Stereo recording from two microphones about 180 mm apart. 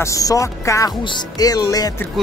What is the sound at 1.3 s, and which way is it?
Music, 20° left (ahead or behind).